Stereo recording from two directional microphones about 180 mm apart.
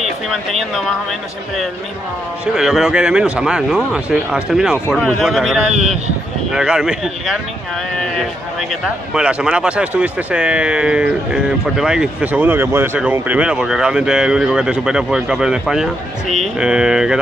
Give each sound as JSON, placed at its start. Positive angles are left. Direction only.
{"t": 0.3, "sound": "speech", "side_deg": 0}
{"t": 2.4, "sound": "speech", "side_deg": -5}
{"t": 5.8, "sound": "speech", "side_deg": -40}
{"t": 6.5, "sound": "speech", "side_deg": -5}